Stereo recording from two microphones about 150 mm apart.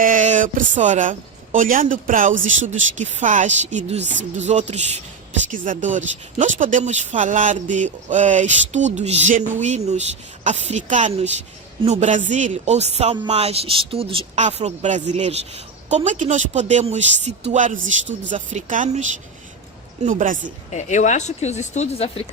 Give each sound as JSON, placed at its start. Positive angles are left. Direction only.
{"t": 0.0, "sound": "a woman's voice", "side_deg": -60}
{"t": 5.5, "sound": "a woman's voice", "side_deg": -60}
{"t": 20.7, "sound": "speech", "side_deg": 50}